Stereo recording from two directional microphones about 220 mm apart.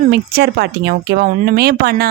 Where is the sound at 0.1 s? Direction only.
50° right (ahead or behind).